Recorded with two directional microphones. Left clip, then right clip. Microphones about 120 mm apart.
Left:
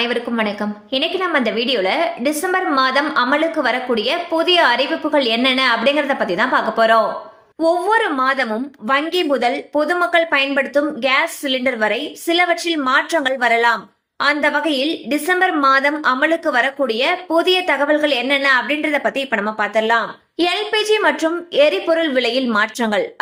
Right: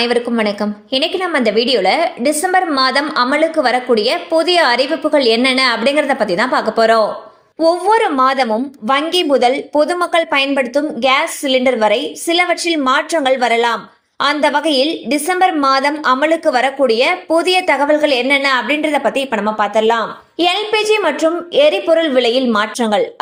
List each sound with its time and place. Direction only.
0.0 s a woman's voice: 40° right (ahead or behind)